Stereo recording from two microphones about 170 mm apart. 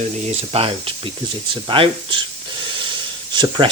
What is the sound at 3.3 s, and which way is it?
Speech, 30° right (ahead or behind).